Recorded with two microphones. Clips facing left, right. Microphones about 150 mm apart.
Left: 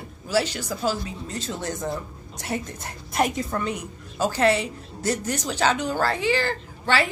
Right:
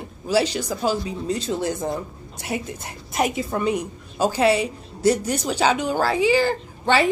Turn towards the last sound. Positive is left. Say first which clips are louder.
# right 5 dB
turn(degrees=-20)  # may be behind; listen again after turning